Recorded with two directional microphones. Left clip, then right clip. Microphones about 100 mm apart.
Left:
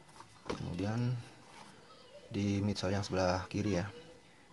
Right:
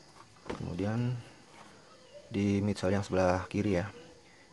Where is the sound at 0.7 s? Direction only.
30° right (ahead or behind).